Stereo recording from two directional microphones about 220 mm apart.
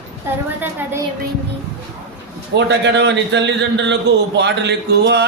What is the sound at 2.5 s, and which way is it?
A man's voice, 55° right (ahead or behind).